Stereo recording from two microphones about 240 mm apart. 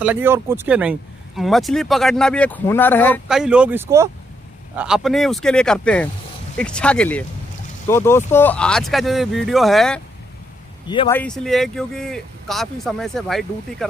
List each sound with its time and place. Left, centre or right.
0.0 s speech: centre
3.3 s speech: centre
10.9 s speech: centre
11.1 s speech: centre